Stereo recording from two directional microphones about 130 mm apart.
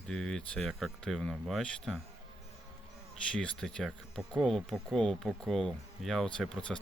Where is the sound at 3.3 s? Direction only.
5° left (ahead or behind).